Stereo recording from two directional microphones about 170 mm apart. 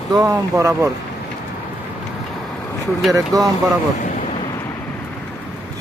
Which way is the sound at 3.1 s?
20° right (ahead or behind).